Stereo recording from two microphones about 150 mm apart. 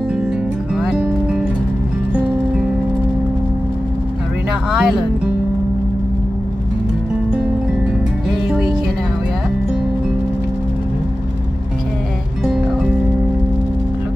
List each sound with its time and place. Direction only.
0.7 s music: centre (ahead or behind)
4.6 s music: 5° right (ahead or behind)